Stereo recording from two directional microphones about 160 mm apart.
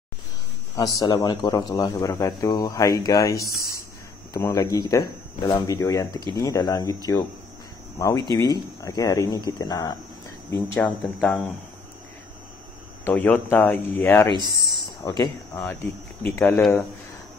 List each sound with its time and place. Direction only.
0.7 s speech: 25° left (ahead or behind)
8.0 s speech: 20° left (ahead or behind)
10.7 s speech: 10° left (ahead or behind)
13.0 s speech: 10° left (ahead or behind)
14.3 s speech: 25° right (ahead or behind)
15.0 s speech: 25° left (ahead or behind)